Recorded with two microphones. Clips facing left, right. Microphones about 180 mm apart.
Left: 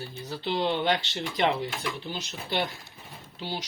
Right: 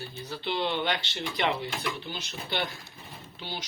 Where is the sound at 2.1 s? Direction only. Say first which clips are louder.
Left 2 dB; 35° left (ahead or behind).